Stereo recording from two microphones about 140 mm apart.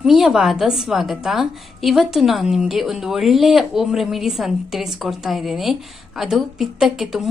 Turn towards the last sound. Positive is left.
turn(degrees=0)  # may be behind; listen again after turning